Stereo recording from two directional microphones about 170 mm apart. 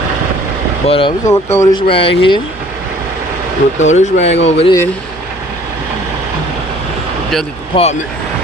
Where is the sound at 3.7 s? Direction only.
45° left (ahead or behind).